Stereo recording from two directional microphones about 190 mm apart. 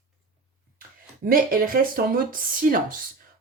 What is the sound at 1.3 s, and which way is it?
Speech, 50° right (ahead or behind).